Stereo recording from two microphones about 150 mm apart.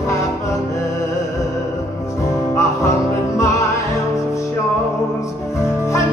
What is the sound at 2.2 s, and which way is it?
Music, 20° left (ahead or behind).